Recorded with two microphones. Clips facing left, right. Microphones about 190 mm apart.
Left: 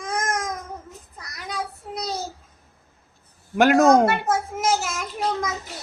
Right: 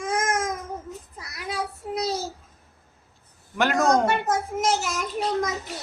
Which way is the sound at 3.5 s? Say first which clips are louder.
Left 7 dB; 45° left (ahead or behind).